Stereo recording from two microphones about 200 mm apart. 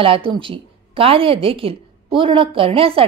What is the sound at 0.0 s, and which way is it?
A woman's voice, 25° right (ahead or behind).